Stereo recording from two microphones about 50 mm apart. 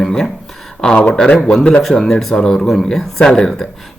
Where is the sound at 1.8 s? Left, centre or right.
Centre.